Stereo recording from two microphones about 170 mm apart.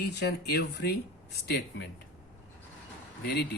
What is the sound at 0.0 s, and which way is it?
Speech, 75° left (ahead or behind).